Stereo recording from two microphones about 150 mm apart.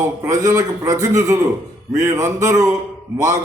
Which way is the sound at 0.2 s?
25° right (ahead or behind).